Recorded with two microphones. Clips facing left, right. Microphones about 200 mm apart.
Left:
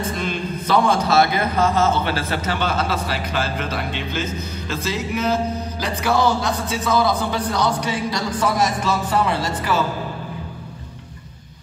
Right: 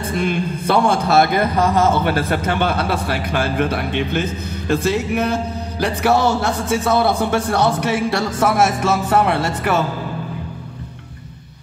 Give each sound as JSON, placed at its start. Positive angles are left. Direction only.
{"t": 0.0, "sound": "a man's voice", "side_deg": -60}
{"t": 8.8, "sound": "music", "side_deg": -65}